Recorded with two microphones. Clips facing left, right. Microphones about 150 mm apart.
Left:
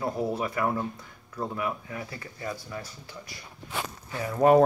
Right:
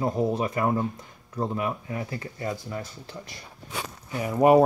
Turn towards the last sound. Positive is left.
turn(degrees=-15)  # may be behind; listen again after turning